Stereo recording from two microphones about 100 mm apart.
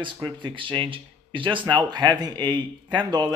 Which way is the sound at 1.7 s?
45° right (ahead or behind).